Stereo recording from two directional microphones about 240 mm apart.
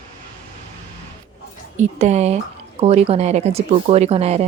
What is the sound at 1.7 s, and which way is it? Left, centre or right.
Speech, right.